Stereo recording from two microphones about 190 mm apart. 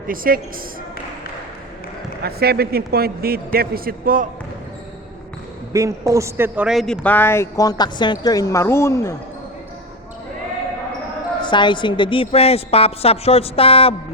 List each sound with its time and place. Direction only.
0.1 s a man's voice: 50° right (ahead or behind)
2.2 s a man's voice: 55° right (ahead or behind)
5.7 s a man's voice: 15° right (ahead or behind); by 9.1 s 15° left (ahead or behind)
11.4 s a woman's voice: 25° left (ahead or behind)